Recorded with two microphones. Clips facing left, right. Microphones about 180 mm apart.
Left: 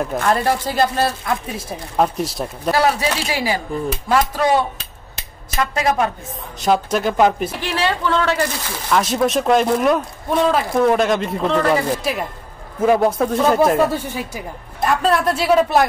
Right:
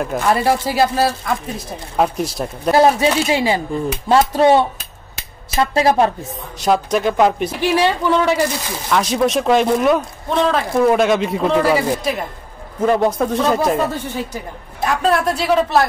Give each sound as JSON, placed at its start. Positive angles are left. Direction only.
{"t": 0.1, "sound": "speech", "side_deg": -10}
{"t": 3.0, "sound": "a woman's voice", "side_deg": -25}
{"t": 6.6, "sound": "speech", "side_deg": 0}
{"t": 7.6, "sound": "speech", "side_deg": -15}
{"t": 8.9, "sound": "speech", "side_deg": 0}
{"t": 12.0, "sound": "speech", "side_deg": 5}
{"t": 14.9, "sound": "speech", "side_deg": 0}